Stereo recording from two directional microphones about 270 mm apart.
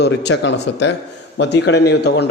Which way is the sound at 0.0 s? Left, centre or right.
Left.